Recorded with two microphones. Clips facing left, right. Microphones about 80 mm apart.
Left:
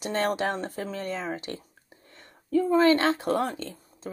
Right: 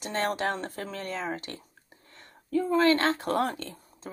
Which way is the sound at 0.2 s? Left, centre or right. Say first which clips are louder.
Left 1 dB; centre.